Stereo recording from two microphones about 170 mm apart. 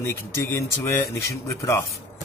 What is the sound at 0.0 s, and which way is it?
Speech, 15° left (ahead or behind).